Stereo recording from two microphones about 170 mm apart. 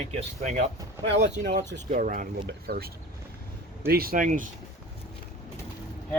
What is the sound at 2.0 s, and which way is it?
Speech, 55° right (ahead or behind).